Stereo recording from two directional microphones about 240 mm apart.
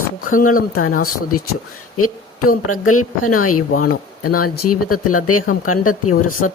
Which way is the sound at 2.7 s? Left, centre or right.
Left.